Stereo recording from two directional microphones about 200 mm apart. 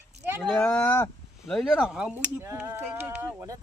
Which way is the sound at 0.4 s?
5° left (ahead or behind).